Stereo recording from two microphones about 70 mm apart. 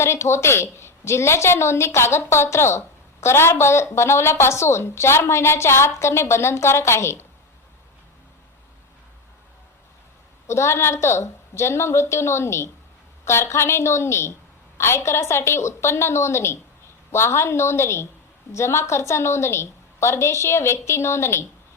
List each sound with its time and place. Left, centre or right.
0.0 s a woman's voice: left
10.4 s a woman's voice: left